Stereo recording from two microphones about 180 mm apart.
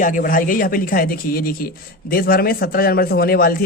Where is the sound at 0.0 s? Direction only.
50° left (ahead or behind).